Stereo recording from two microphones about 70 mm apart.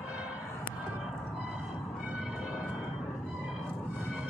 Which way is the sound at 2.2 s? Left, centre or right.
Centre.